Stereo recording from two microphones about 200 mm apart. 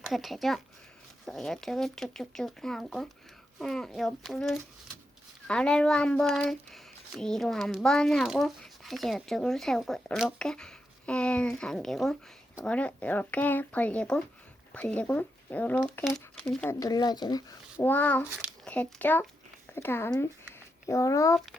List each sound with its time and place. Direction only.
0.1 s a child's voice: centre (ahead or behind)
16.8 s a child's voice: 20° left (ahead or behind)